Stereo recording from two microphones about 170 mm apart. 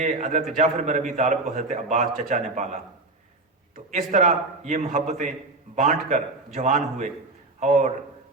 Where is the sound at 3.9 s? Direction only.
45° right (ahead or behind).